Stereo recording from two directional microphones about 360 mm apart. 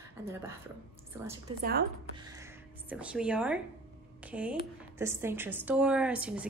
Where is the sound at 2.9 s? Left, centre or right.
Centre.